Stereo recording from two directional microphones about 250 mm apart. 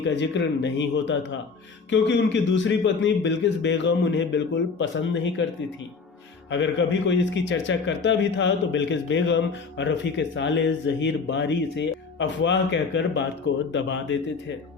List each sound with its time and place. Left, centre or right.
0.0 s a man's voice: left
6.5 s a man's voice: left